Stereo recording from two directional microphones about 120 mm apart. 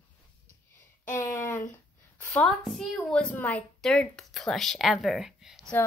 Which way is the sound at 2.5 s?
Centre (ahead or behind).